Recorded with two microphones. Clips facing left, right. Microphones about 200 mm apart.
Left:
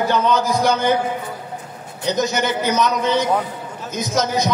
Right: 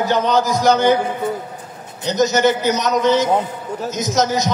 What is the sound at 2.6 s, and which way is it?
A man's voice, 50° left (ahead or behind).